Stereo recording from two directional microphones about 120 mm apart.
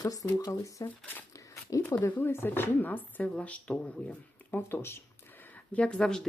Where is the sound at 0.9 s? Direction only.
15° left (ahead or behind).